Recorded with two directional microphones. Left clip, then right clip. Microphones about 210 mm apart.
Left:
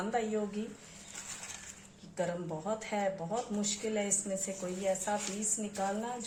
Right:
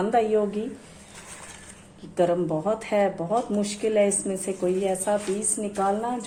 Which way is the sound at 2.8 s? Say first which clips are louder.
Right 11 dB; 40° right (ahead or behind).